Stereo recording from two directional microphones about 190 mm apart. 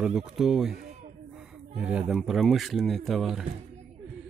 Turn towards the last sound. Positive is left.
turn(degrees=0)  # may be behind; listen again after turning